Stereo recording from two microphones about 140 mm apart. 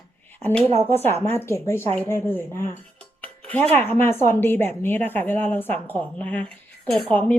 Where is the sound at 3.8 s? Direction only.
15° left (ahead or behind).